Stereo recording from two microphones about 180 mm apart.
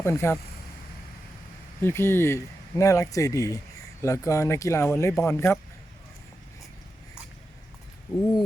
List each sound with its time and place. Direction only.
0.0 s speech: 15° left (ahead or behind)
1.8 s speech: 15° left (ahead or behind)